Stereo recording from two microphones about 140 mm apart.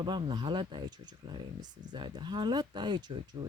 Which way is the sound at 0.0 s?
35° right (ahead or behind).